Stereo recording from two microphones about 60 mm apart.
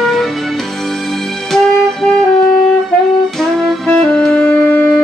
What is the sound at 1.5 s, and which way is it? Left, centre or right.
Music, centre.